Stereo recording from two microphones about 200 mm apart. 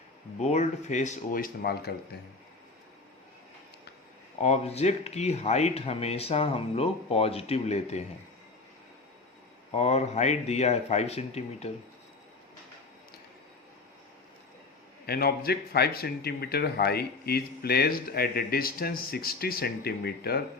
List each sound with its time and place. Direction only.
0.3 s speech: 35° left (ahead or behind)
4.4 s speech: 35° left (ahead or behind)
9.7 s speech: 30° left (ahead or behind)
15.0 s speech: 50° left (ahead or behind)